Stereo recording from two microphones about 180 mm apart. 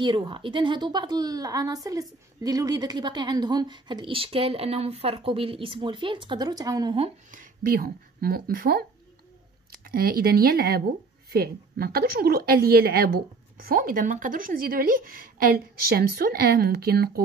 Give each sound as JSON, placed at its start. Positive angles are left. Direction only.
{"t": 0.0, "sound": "a woman's voice", "side_deg": -25}
{"t": 7.2, "sound": "a woman's voice", "side_deg": -50}